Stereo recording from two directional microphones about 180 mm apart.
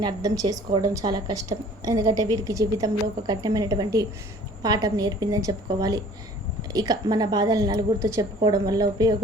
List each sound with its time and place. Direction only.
0.0 s a woman's voice: 20° right (ahead or behind)